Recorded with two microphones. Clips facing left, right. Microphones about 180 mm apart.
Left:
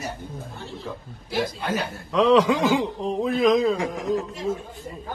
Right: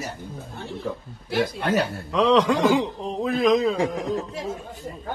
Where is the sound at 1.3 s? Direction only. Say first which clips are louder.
Right 2 dB; 60° right (ahead or behind).